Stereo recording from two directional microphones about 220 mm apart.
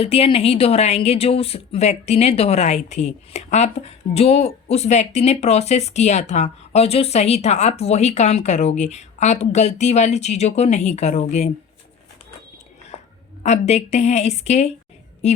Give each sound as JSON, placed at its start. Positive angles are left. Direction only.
{"t": 0.0, "sound": "speech", "side_deg": 25}
{"t": 13.4, "sound": "a woman's voice", "side_deg": 30}